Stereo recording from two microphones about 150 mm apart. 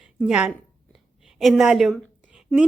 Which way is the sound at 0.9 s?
Centre (ahead or behind).